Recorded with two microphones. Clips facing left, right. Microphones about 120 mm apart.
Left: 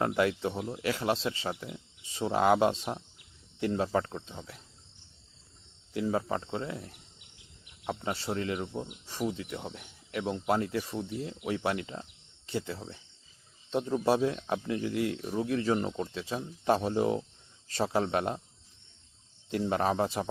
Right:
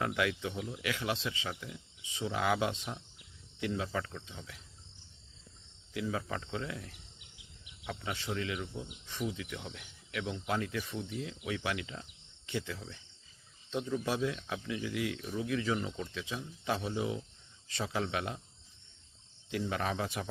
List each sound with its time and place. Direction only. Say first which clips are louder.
0.0 s speech: left 5 dB; 35° left (ahead or behind)
5.9 s speech: left 6 dB; 35° left (ahead or behind)
13.7 s speech: left 7 dB; 45° left (ahead or behind)
19.5 s speech: left 6 dB; 40° left (ahead or behind)